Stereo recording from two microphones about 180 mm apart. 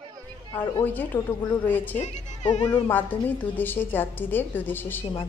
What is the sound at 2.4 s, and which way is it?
Speech, 25° left (ahead or behind).